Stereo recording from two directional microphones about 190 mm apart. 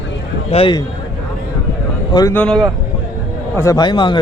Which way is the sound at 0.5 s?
30° left (ahead or behind).